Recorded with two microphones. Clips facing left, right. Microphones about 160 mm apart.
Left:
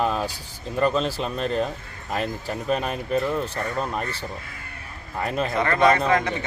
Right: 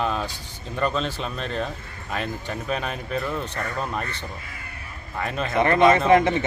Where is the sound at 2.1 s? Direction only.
35° left (ahead or behind).